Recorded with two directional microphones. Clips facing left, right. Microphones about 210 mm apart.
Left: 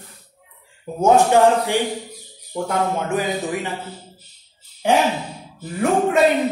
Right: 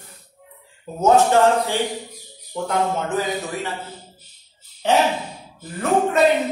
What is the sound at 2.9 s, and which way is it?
Speech, 15° left (ahead or behind).